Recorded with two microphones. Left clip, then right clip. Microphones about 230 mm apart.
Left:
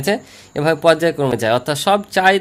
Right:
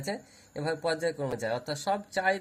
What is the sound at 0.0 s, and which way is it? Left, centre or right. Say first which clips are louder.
Speech: left 17 dB; left.